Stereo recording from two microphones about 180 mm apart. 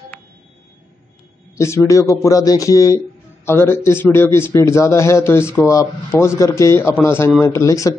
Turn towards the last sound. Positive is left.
turn(degrees=15)  # may be behind; listen again after turning